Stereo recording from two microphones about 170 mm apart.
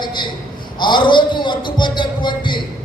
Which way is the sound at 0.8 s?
25° left (ahead or behind).